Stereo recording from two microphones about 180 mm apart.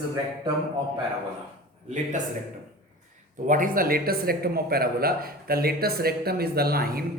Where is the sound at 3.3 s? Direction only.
45° right (ahead or behind).